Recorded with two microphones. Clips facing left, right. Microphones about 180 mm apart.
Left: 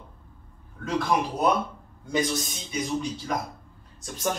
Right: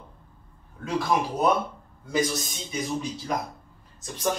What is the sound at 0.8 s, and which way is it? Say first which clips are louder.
A man's voice: even; centre (ahead or behind).